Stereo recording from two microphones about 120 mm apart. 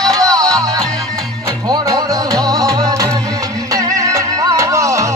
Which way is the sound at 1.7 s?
30° right (ahead or behind).